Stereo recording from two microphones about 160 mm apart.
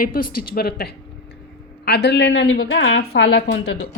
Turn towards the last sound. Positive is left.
turn(degrees=90)